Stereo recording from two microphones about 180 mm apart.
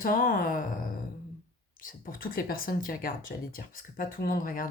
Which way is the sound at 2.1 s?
50° left (ahead or behind).